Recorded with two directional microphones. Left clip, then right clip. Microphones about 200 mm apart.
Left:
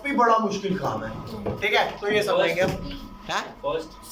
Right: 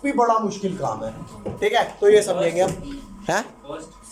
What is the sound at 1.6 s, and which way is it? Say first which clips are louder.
Speech: right 4 dB; 35° right (ahead or behind).